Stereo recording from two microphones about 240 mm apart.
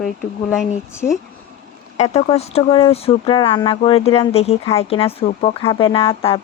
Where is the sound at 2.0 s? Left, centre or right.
Left.